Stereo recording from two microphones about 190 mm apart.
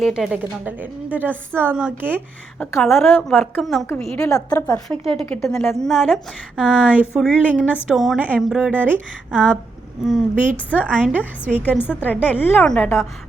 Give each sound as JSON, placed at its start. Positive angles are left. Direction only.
{"t": 0.0, "sound": "a woman's voice", "side_deg": 0}
{"t": 2.6, "sound": "a woman's voice", "side_deg": 0}
{"t": 4.4, "sound": "a woman's voice", "side_deg": 15}
{"t": 11.2, "sound": "a woman's voice", "side_deg": 10}